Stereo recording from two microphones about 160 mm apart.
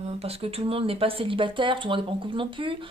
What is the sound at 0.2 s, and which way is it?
Speech, 40° right (ahead or behind).